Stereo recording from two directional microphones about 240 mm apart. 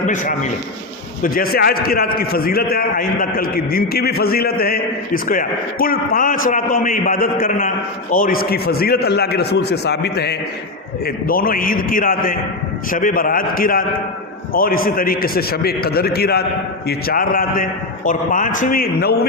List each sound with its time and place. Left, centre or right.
0.0 s a man's voice: left